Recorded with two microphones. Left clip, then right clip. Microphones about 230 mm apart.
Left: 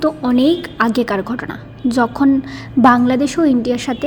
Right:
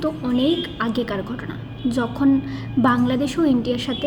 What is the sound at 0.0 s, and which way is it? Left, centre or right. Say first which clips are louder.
A woman's voice: left 7 dB; left.